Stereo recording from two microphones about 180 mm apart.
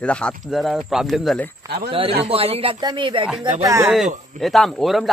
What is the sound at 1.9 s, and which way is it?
Speech, 30° right (ahead or behind).